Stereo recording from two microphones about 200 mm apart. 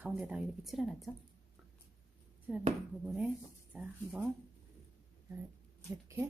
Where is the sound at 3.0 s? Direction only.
5° right (ahead or behind).